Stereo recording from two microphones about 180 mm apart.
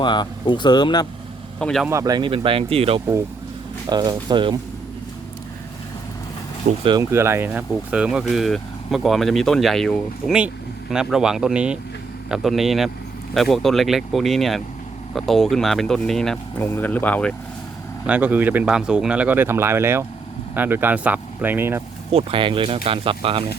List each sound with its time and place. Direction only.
0.0 s speech: 25° left (ahead or behind)
1.5 s speech: 5° left (ahead or behind)
1.9 s speech: 20° right (ahead or behind)
3.8 s speech: 20° right (ahead or behind)
6.8 s speech: 20° right (ahead or behind); by 17.3 s 5° left (ahead or behind)
18.0 s speech: 10° right (ahead or behind)
22.1 s speech: 30° right (ahead or behind)